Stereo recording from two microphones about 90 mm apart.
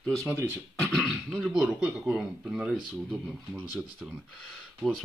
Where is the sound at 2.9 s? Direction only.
5° left (ahead or behind).